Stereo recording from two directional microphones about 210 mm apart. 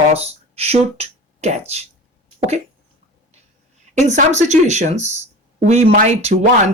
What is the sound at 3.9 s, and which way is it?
Speech, 35° right (ahead or behind).